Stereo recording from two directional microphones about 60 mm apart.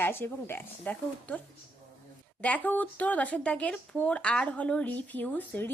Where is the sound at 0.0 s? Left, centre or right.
Left.